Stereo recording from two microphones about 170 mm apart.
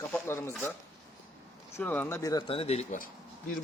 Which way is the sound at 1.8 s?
10° left (ahead or behind).